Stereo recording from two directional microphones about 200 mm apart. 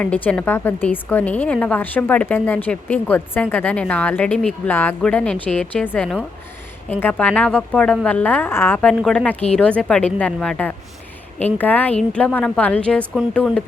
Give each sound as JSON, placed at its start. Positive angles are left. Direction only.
{"t": 0.0, "sound": "a woman's voice", "side_deg": 5}